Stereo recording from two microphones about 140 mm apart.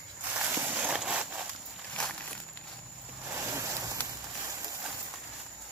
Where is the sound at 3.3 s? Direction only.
20° right (ahead or behind).